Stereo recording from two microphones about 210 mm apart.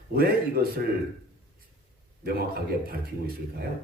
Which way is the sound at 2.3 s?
45° right (ahead or behind).